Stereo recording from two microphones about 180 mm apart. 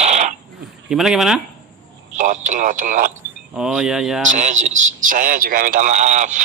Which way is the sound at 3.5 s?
5° right (ahead or behind).